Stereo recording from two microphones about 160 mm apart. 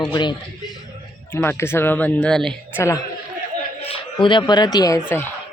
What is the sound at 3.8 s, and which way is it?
Speech, 35° left (ahead or behind).